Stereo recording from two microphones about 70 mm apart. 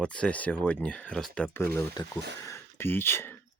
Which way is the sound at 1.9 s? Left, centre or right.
Left.